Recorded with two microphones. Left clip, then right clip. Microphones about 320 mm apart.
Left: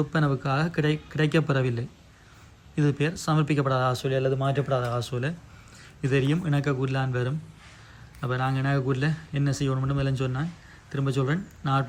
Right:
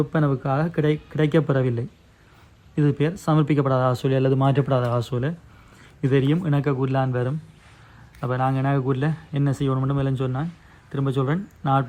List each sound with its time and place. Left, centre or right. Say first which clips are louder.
0.2 s speech: right 2 dB; centre
4.7 s speech: right 4 dB; right
4.9 s speech: right 4 dB; centre